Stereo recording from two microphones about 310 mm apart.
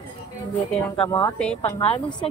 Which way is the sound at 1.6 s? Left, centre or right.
Centre.